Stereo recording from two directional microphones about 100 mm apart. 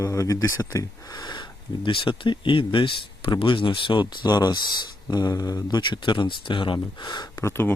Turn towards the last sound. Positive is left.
turn(degrees=25)  # may be behind; listen again after turning